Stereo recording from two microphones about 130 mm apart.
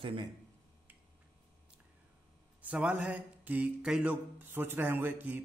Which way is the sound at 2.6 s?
10° right (ahead or behind).